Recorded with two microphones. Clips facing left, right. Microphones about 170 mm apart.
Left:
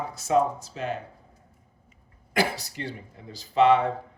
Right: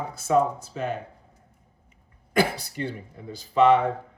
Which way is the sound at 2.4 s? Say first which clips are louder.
Right 3 dB; 55° right (ahead or behind).